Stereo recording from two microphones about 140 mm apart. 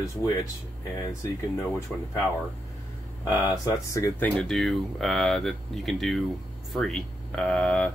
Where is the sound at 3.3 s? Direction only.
25° left (ahead or behind).